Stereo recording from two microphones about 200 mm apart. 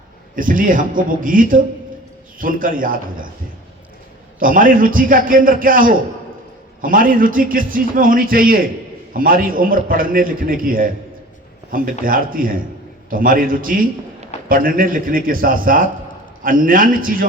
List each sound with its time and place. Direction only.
0.3 s a man's voice: 45° right (ahead or behind)
4.4 s a man's voice: 45° right (ahead or behind)